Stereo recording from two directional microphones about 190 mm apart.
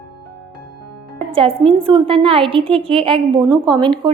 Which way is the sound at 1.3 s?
30° right (ahead or behind).